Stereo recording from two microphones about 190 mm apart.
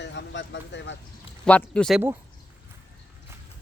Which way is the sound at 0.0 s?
65° left (ahead or behind).